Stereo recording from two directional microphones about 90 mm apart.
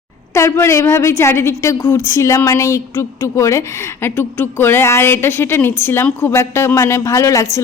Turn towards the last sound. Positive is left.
turn(degrees=35)  # may be behind; listen again after turning